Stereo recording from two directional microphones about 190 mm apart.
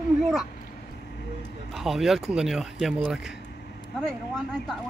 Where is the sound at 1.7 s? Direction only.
Centre (ahead or behind).